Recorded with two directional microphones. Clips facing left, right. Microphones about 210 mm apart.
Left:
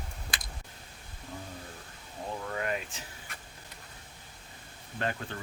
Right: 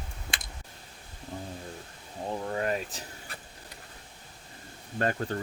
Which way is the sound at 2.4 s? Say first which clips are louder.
Right 4 dB; 30° right (ahead or behind).